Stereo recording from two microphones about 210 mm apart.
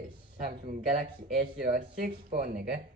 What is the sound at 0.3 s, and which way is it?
Speech, 35° right (ahead or behind).